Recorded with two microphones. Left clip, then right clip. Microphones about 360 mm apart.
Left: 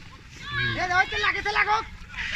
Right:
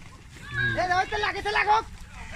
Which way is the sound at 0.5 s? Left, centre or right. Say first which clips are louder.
Left 1 dB; right.